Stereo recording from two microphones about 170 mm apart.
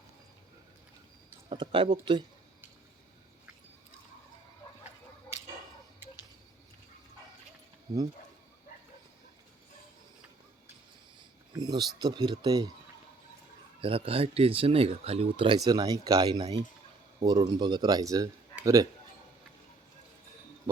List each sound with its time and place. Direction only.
1.5 s speech: 30° right (ahead or behind)
11.5 s speech: 25° right (ahead or behind)
13.8 s speech: 35° right (ahead or behind)